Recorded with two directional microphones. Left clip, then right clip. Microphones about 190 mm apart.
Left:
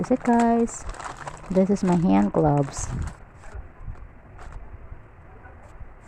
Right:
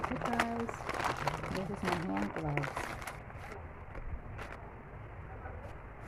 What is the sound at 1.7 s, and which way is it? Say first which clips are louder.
Speech: left 13 dB; 45° left (ahead or behind).